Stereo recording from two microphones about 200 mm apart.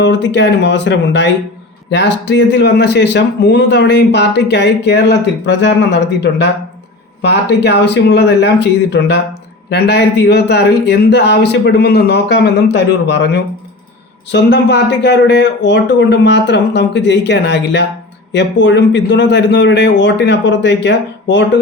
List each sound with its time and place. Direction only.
0.0 s speech: 60° left (ahead or behind)